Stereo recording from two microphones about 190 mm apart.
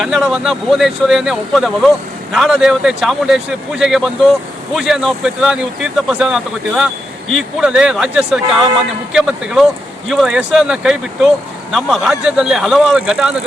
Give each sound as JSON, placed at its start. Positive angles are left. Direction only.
{"t": 0.0, "sound": "speech", "side_deg": 0}